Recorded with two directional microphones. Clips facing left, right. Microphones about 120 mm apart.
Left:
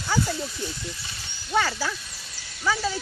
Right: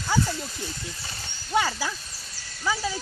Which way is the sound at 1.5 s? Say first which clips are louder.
Even; 15° right (ahead or behind).